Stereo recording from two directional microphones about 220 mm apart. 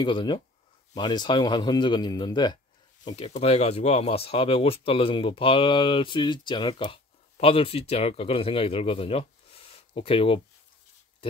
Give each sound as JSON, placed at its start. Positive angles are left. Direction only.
{"t": 0.0, "sound": "speech", "side_deg": 20}